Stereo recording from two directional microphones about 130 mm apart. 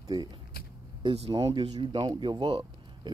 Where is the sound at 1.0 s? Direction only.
50° right (ahead or behind).